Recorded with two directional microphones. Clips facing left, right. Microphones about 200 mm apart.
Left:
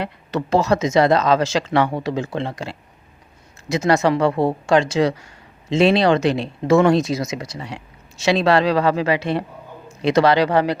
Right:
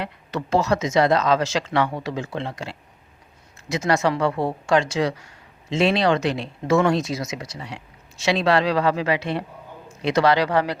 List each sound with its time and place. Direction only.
0.0 s a woman's voice: 30° left (ahead or behind)